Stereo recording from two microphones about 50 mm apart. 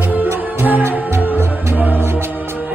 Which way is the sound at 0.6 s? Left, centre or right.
Right.